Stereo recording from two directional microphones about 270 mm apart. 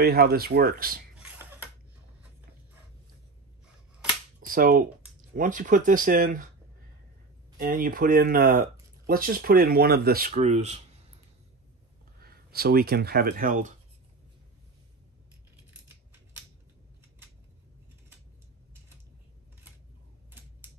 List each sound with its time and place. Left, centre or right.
0.0 s speech: right
4.4 s speech: right
7.5 s speech: right
12.2 s speech: right